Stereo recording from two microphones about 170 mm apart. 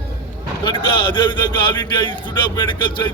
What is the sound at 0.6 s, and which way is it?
A man's voice, 30° left (ahead or behind).